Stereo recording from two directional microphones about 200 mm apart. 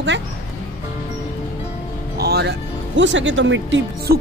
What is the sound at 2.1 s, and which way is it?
Speech, 55° right (ahead or behind).